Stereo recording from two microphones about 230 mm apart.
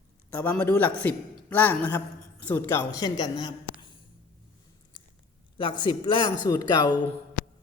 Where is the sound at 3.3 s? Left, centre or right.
Centre.